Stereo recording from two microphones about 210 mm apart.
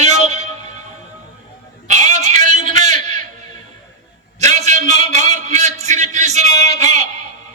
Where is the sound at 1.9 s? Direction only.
35° right (ahead or behind).